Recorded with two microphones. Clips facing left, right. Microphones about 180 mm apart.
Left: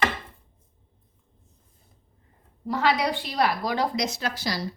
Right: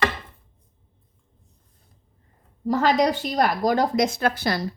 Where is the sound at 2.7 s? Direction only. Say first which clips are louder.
Right 4 dB; 45° right (ahead or behind).